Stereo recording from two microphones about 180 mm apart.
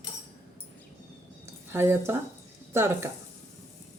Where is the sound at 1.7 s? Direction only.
15° right (ahead or behind).